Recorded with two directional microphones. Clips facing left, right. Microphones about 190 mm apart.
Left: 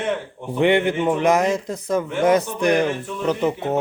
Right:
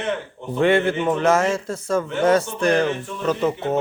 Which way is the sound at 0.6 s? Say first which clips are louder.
Even; 15° left (ahead or behind).